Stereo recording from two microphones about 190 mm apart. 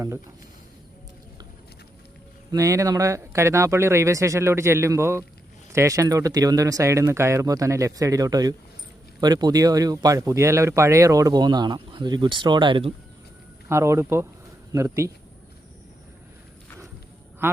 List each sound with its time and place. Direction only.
2.5 s speech: 15° right (ahead or behind)
13.7 s speech: 15° right (ahead or behind)
17.4 s speech: 15° right (ahead or behind)